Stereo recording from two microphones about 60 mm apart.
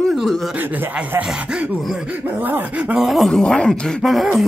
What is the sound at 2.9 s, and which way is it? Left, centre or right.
Speech, centre.